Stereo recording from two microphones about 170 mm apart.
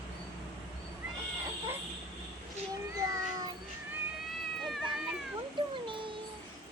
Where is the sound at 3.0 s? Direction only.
20° right (ahead or behind).